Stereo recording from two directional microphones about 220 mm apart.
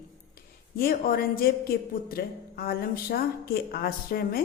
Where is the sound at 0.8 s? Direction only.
45° left (ahead or behind).